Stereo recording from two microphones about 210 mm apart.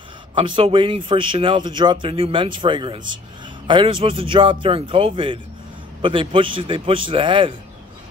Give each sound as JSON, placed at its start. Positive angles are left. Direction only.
{"t": 0.3, "sound": "speech", "side_deg": -25}